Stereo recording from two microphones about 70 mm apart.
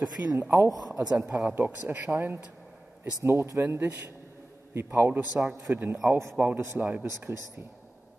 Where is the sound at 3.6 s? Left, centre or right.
Right.